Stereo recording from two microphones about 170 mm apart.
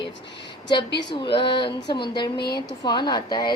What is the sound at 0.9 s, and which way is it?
Speech, 90° left.